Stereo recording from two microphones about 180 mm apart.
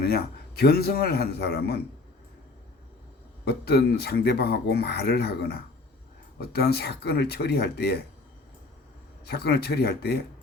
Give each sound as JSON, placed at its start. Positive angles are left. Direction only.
{"t": 0.0, "sound": "speech", "side_deg": 60}
{"t": 3.4, "sound": "speech", "side_deg": 65}
{"t": 9.2, "sound": "speech", "side_deg": 60}